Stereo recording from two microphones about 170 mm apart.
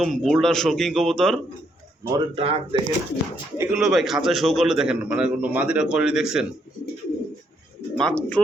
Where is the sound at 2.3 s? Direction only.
35° right (ahead or behind).